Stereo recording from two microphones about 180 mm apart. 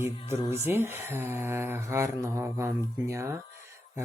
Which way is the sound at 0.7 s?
15° right (ahead or behind).